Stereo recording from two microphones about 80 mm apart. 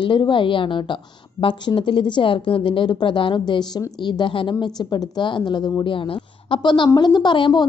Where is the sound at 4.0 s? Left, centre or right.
Left.